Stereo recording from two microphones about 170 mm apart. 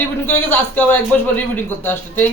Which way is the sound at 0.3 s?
10° left (ahead or behind).